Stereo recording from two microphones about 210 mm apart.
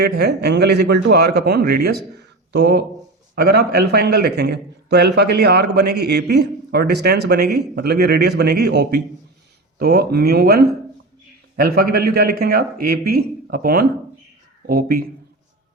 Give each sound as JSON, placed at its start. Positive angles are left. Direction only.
{"t": 0.0, "sound": "a man's voice", "side_deg": -50}